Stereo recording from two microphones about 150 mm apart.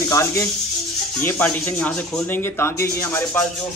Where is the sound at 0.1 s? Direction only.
20° left (ahead or behind).